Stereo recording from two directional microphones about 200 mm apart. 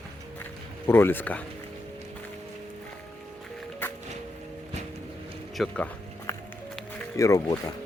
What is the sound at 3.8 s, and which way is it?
Music, 10° left (ahead or behind).